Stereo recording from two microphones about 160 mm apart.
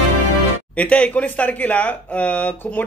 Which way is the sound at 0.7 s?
10° left (ahead or behind).